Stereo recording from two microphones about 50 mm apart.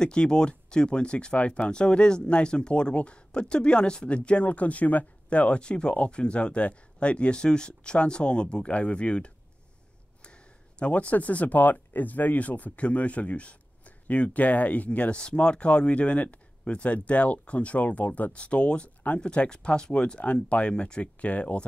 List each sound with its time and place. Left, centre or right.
0.0 s speech: centre